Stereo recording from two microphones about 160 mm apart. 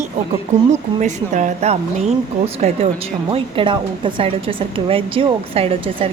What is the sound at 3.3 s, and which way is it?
A woman's voice, 35° right (ahead or behind).